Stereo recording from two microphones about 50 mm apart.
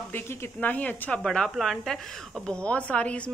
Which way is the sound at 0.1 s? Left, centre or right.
Left.